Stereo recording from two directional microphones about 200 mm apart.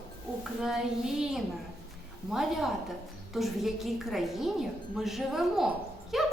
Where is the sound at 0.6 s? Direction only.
Centre (ahead or behind).